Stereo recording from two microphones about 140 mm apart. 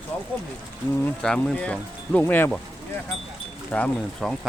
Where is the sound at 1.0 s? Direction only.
5° left (ahead or behind).